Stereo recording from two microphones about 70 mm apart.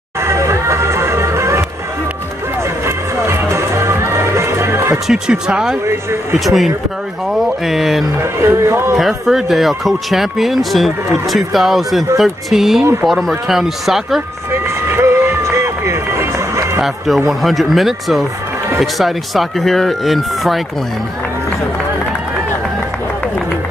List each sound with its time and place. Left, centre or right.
0.2 s music: right
3.3 s music: right
5.0 s speech: centre
8.2 s a man's voice: right
8.9 s speech: centre
14.5 s music: right
17.3 s speech: centre